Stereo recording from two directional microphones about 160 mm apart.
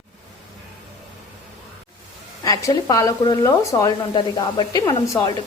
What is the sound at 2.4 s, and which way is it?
Speech, 20° left (ahead or behind).